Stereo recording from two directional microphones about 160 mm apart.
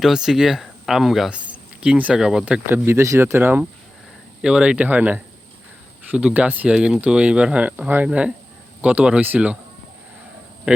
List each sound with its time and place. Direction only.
0.0 s speech: 5° right (ahead or behind)
10.7 s speech: 10° right (ahead or behind)